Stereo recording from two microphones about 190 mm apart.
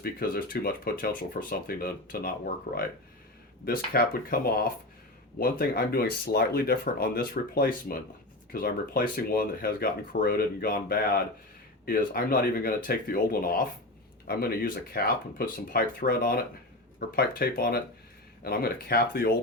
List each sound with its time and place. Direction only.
0.0 s speech: 50° left (ahead or behind)